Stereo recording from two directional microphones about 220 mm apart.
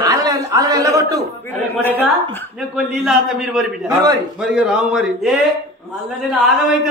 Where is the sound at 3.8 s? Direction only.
15° right (ahead or behind).